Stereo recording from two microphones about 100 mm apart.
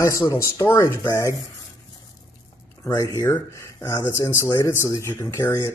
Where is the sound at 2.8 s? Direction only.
35° left (ahead or behind).